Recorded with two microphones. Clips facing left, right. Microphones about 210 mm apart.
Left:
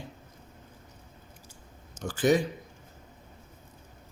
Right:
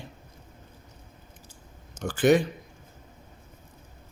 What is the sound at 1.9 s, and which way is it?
Speech, 60° right (ahead or behind).